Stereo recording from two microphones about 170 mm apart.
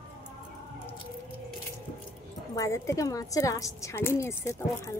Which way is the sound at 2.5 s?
20° left (ahead or behind).